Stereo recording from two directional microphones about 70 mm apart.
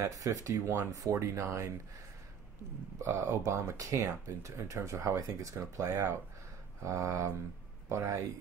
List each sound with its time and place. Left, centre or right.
0.0 s speech: right
3.0 s speech: right